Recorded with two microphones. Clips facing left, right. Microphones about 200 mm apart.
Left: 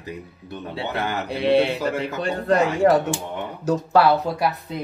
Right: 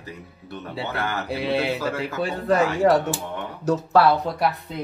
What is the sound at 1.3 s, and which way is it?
Speech, 5° right (ahead or behind).